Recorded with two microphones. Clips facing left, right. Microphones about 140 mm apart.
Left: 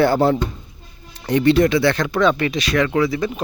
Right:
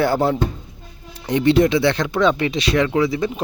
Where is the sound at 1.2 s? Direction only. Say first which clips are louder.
Even; 20° right (ahead or behind).